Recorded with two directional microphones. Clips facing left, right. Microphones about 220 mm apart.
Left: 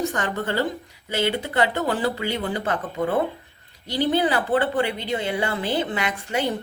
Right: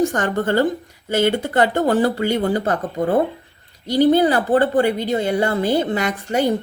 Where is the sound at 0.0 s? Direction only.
50° right (ahead or behind).